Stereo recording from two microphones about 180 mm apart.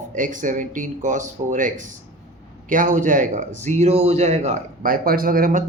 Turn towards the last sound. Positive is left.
turn(degrees=-50)  # may be behind; listen again after turning